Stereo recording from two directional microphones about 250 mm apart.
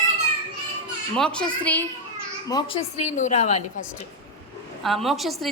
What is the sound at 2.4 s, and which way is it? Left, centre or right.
A woman's voice, centre.